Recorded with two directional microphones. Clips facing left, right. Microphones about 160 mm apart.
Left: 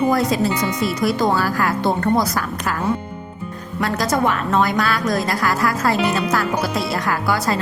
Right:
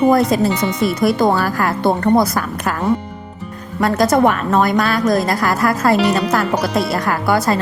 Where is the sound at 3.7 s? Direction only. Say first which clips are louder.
Right 6 dB; 50° right (ahead or behind).